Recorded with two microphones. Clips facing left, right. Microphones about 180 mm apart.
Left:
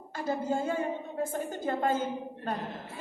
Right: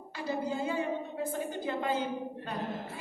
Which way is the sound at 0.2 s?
45° left (ahead or behind).